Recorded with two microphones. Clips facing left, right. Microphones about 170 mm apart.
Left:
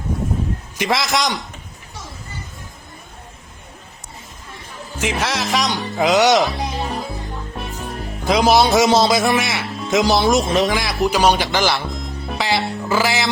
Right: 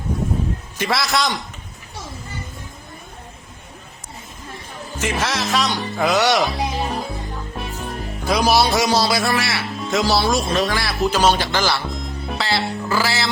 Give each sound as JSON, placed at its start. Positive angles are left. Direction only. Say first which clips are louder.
{"t": 0.8, "sound": "speech", "louder": "left 1 dB", "side_deg": 15}
{"t": 4.9, "sound": "speech", "louder": "left 1 dB", "side_deg": 10}
{"t": 6.6, "sound": "music", "louder": "right 1 dB", "side_deg": 0}
{"t": 8.4, "sound": "speech", "louder": "left 4 dB", "side_deg": 20}
{"t": 11.9, "sound": "music", "louder": "even", "side_deg": 0}
{"t": 12.4, "sound": "music", "louder": "left 2 dB", "side_deg": 15}
{"t": 12.9, "sound": "speech", "louder": "left 3 dB", "side_deg": 20}